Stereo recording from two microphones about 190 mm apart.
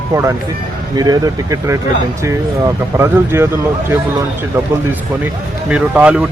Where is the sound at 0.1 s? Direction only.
15° right (ahead or behind).